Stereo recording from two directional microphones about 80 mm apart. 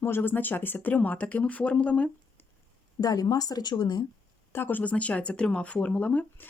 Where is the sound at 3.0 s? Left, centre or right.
Left.